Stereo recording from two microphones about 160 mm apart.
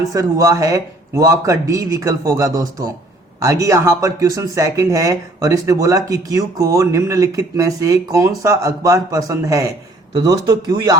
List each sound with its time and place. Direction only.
0.0 s speech: 20° right (ahead or behind)